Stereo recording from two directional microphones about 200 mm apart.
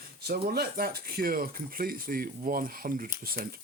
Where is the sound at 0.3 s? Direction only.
50° right (ahead or behind).